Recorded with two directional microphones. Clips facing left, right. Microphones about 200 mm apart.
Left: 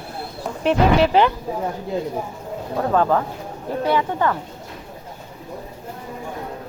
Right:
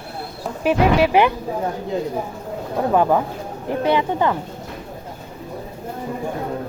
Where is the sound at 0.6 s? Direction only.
10° right (ahead or behind).